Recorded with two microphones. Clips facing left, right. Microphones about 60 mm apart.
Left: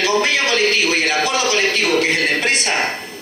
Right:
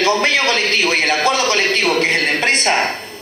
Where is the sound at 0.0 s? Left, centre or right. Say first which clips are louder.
Right 2 dB; right.